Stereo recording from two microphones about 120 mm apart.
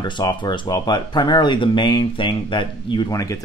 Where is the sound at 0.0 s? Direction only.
35° left (ahead or behind).